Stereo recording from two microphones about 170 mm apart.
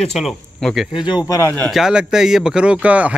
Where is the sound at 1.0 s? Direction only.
20° left (ahead or behind).